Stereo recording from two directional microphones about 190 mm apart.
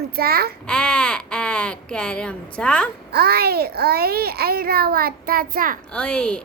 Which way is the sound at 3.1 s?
55° right (ahead or behind).